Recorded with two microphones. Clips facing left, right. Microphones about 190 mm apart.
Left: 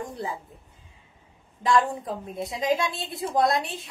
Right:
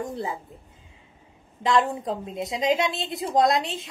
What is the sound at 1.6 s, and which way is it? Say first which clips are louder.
A woman's voice: even; 20° right (ahead or behind).